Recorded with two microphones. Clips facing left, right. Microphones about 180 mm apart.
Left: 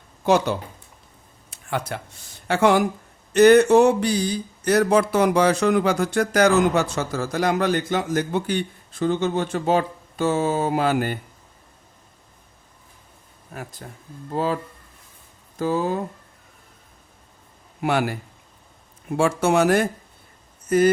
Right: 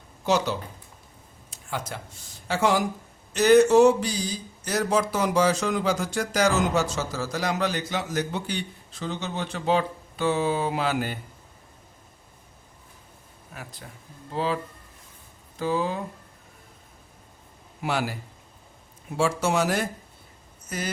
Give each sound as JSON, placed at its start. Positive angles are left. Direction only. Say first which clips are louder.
{"t": 0.3, "sound": "speech", "louder": "left 5 dB", "side_deg": 55}
{"t": 1.5, "sound": "a sound", "louder": "left 6 dB", "side_deg": 60}
{"t": 2.5, "sound": "speech", "louder": "left 5 dB", "side_deg": 60}
{"t": 13.5, "sound": "speech", "louder": "left 6 dB", "side_deg": 45}
{"t": 17.8, "sound": "speech", "louder": "left 5 dB", "side_deg": 55}